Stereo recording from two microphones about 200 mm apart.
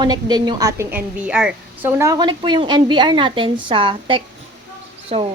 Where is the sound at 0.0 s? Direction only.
20° right (ahead or behind).